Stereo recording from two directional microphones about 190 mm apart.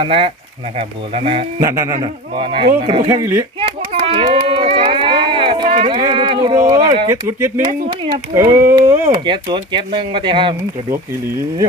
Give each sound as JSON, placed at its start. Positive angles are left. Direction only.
{"t": 0.0, "sound": "speech", "side_deg": -30}
{"t": 1.6, "sound": "a child's voice", "side_deg": -15}
{"t": 7.1, "sound": "speech", "side_deg": -15}
{"t": 9.2, "sound": "speech", "side_deg": -25}
{"t": 10.9, "sound": "speech", "side_deg": -15}